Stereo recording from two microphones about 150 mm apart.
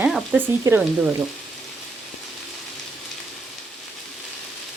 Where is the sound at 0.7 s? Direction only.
20° right (ahead or behind).